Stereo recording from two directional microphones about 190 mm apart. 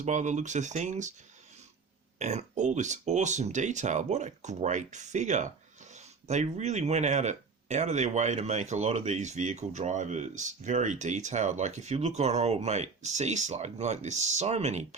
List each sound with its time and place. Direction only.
0.0 s speech: 40° right (ahead or behind)
2.1 s speech: 35° right (ahead or behind)